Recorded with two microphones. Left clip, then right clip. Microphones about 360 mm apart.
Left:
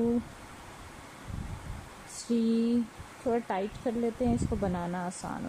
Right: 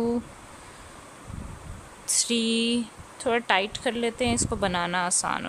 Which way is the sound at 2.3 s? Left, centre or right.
Right.